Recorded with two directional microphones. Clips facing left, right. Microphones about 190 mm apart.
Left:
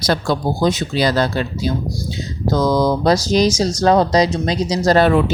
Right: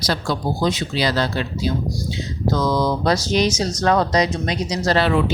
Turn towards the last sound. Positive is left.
turn(degrees=45)  # may be behind; listen again after turning